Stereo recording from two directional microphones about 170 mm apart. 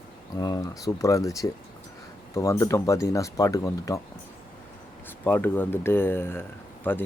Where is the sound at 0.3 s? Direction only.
20° left (ahead or behind).